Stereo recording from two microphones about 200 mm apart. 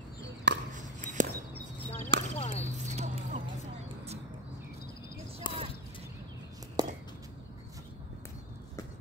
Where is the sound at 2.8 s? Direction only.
35° right (ahead or behind).